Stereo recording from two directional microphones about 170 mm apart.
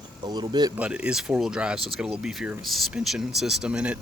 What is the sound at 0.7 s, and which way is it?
Speech, 10° right (ahead or behind).